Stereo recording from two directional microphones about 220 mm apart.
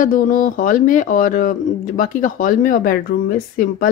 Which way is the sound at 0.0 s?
40° left (ahead or behind).